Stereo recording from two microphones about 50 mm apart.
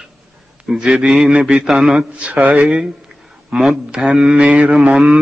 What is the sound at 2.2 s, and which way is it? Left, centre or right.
Speech, right.